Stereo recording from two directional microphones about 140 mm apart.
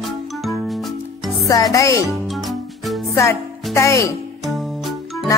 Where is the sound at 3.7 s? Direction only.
20° left (ahead or behind).